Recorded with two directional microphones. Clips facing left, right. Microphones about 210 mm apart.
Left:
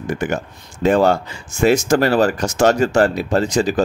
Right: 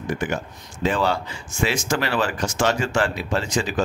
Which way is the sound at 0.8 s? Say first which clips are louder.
Left 8 dB; 45° left (ahead or behind).